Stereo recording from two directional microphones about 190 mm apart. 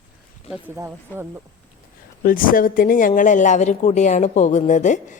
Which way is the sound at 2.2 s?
45° left (ahead or behind).